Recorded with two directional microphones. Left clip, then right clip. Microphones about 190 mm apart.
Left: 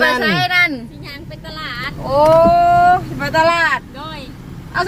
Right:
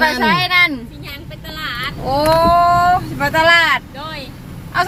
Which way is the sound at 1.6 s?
10° left (ahead or behind).